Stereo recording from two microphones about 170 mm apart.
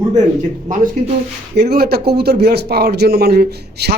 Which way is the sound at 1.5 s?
65° right (ahead or behind).